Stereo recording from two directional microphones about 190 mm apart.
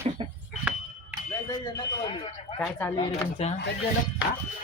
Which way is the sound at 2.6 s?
10° left (ahead or behind).